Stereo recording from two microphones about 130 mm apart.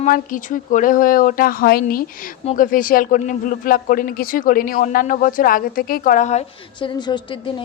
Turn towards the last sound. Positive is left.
turn(degrees=40)  # may be behind; listen again after turning